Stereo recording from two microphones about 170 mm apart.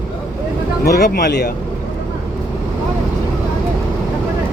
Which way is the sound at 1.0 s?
70° left (ahead or behind).